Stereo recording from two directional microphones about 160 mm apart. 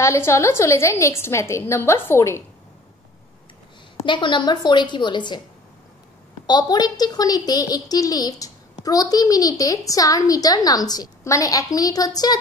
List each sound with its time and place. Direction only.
0.0 s a woman's voice: 15° left (ahead or behind)
4.0 s a woman's voice: 30° left (ahead or behind)
6.4 s a woman's voice: 25° left (ahead or behind)